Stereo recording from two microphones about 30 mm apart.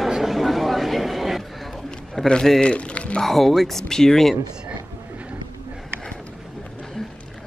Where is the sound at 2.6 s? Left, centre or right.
Left.